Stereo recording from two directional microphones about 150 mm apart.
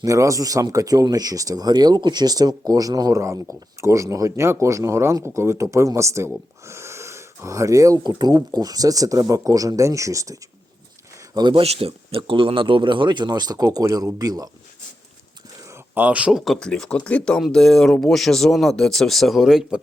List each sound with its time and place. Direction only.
0.0 s speech: 20° right (ahead or behind)
15.6 s speech: 15° right (ahead or behind)